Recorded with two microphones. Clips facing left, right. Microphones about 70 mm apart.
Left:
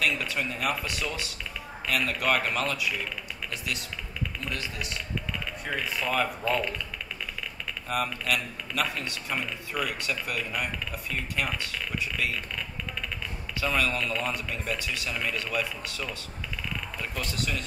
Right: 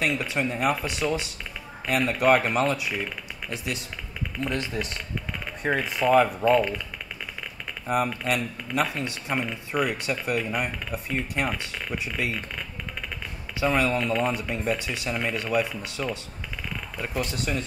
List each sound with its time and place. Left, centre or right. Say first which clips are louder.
0.0 s speech: right 3 dB; right
7.9 s speech: right 4 dB; right
13.6 s speech: right 4 dB; right
17.2 s speech: right 4 dB; right